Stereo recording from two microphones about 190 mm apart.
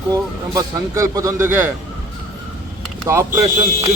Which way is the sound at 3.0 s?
15° right (ahead or behind).